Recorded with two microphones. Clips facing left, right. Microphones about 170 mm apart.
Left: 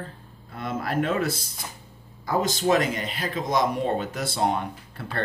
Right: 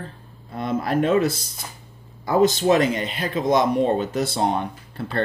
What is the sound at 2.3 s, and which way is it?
Speech, 25° right (ahead or behind).